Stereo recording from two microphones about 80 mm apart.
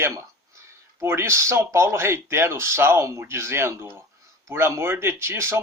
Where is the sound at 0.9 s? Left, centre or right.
Right.